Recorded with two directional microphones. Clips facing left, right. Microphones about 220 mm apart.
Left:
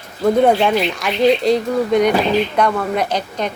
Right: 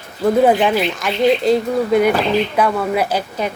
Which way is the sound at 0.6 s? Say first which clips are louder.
Even; centre (ahead or behind).